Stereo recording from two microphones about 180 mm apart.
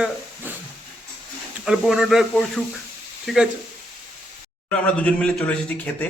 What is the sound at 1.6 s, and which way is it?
A man's voice, 5° right (ahead or behind).